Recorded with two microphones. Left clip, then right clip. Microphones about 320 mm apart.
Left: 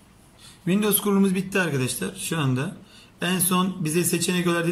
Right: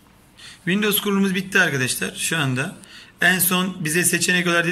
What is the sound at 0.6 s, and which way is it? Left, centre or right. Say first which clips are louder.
A man's voice: right 3 dB; centre.